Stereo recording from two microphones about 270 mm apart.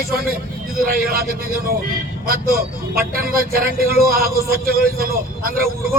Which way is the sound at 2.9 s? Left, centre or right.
Right.